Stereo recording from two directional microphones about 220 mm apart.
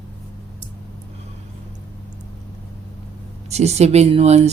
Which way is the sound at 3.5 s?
30° right (ahead or behind).